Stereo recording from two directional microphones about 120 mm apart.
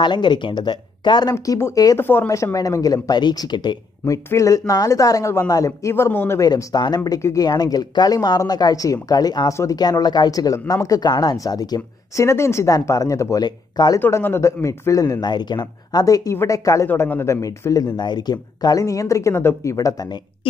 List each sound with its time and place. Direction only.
0.0 s speech: 40° left (ahead or behind)
1.3 s speech: 25° left (ahead or behind)
2.0 s speech: 20° left (ahead or behind); by 3.7 s 35° left (ahead or behind)
4.0 s speech: 25° left (ahead or behind)
6.4 s speech: 35° left (ahead or behind)
9.5 s speech: 25° left (ahead or behind)
9.8 s speech: 35° left (ahead or behind)
13.9 s speech: 20° left (ahead or behind)
16.8 s speech: 20° left (ahead or behind)
17.4 s speech: 30° left (ahead or behind)